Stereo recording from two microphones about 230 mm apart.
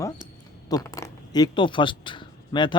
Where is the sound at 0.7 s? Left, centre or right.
Centre.